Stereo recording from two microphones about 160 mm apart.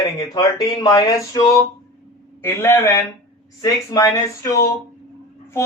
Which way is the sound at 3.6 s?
20° left (ahead or behind).